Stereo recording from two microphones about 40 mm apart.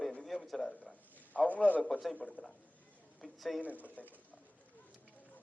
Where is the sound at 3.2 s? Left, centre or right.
Centre.